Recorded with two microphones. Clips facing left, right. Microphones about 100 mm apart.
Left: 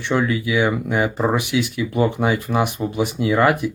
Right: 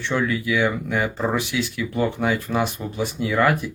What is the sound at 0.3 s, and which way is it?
Speech, 10° left (ahead or behind).